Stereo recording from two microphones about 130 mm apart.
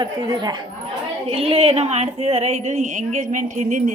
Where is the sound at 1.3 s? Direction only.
45° right (ahead or behind).